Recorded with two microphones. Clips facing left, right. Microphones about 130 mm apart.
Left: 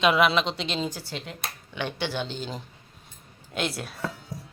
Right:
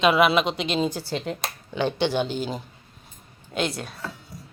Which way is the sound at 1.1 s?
40° right (ahead or behind).